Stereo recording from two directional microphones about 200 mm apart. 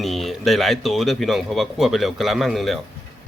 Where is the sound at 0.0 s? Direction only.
Centre (ahead or behind).